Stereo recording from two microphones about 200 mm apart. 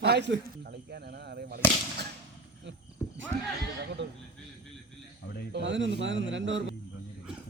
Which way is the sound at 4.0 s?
65° right (ahead or behind).